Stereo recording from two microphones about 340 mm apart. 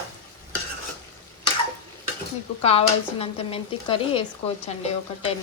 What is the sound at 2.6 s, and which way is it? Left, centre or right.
Speech, centre.